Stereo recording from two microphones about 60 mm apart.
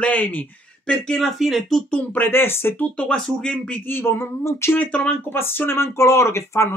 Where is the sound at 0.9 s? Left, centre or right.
Centre.